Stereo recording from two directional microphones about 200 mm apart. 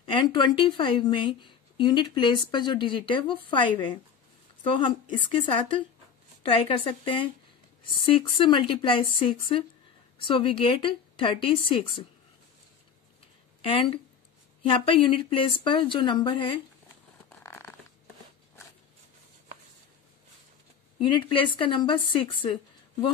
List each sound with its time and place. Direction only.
0.0 s speech: 25° left (ahead or behind)
13.6 s speech: 25° left (ahead or behind)
17.4 s a sound: 10° left (ahead or behind)
21.0 s speech: 25° left (ahead or behind)